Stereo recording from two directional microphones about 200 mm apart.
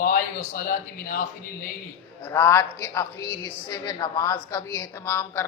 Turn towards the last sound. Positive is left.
turn(degrees=10)  # may be behind; listen again after turning